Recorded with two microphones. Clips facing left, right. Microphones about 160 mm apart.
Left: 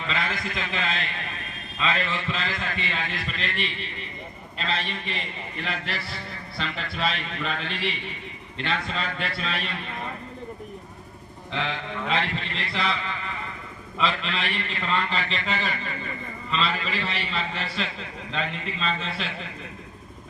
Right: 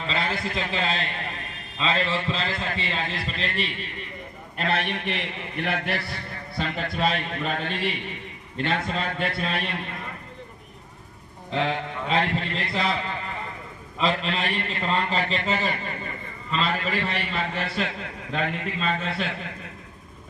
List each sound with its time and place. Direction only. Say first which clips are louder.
0.1 s a man's voice: right 2 dB; 30° right (ahead or behind)
4.5 s a man's voice: right 4 dB; 60° right (ahead or behind)
6.6 s a man's voice: right 4 dB; 50° right (ahead or behind)
11.5 s a man's voice: right 4 dB; 40° right (ahead or behind)
14.0 s a man's voice: right 2 dB; 40° right (ahead or behind)